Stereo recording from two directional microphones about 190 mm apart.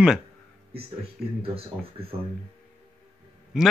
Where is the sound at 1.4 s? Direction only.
30° right (ahead or behind).